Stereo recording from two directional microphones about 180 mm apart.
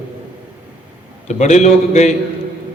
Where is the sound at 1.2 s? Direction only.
40° left (ahead or behind).